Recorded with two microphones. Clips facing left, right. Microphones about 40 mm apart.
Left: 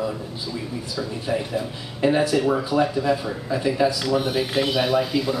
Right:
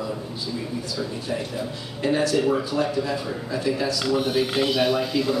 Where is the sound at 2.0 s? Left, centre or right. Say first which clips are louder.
Left 2 dB; centre.